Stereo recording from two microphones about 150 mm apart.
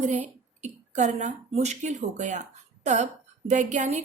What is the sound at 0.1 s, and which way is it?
Speech, 50° right (ahead or behind).